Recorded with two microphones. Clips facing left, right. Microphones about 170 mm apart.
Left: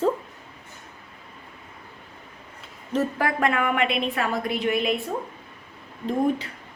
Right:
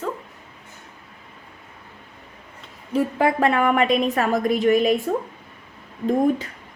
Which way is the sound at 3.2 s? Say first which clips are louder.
Right 5 dB; 25° right (ahead or behind).